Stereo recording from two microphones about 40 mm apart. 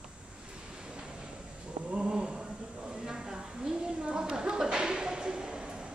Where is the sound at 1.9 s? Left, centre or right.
Right.